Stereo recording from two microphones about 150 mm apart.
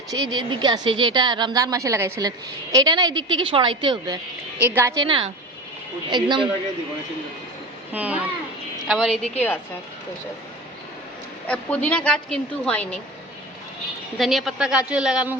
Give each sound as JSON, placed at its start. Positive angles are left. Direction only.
{"t": 0.1, "sound": "a woman's voice", "side_deg": -30}
{"t": 4.6, "sound": "speech", "side_deg": -15}
{"t": 4.9, "sound": "speech", "side_deg": -35}
{"t": 7.9, "sound": "speech", "side_deg": -10}
{"t": 11.4, "sound": "a woman's voice", "side_deg": 10}
{"t": 14.2, "sound": "speech", "side_deg": 0}